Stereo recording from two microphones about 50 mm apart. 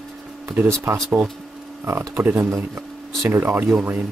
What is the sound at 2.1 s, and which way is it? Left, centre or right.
Speech, right.